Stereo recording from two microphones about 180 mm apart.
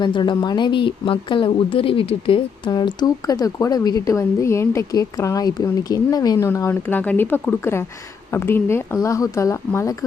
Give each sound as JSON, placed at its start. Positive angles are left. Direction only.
{"t": 0.0, "sound": "a woman's voice", "side_deg": 25}